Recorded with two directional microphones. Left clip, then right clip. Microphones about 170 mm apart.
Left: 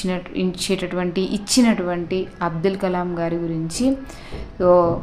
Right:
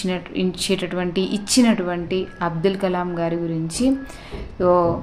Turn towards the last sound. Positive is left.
turn(degrees=5)  # may be behind; listen again after turning